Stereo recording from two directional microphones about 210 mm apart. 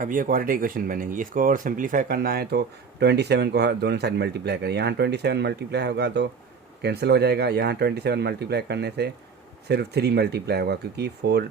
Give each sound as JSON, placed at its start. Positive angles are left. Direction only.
{"t": 0.0, "sound": "speech", "side_deg": -40}